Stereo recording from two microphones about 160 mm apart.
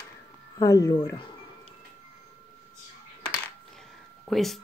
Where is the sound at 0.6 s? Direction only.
20° left (ahead or behind).